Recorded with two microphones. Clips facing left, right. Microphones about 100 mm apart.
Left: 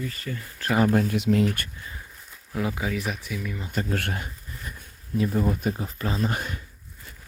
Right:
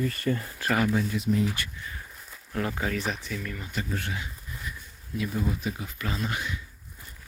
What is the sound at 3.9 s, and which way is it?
Speech, 60° left (ahead or behind).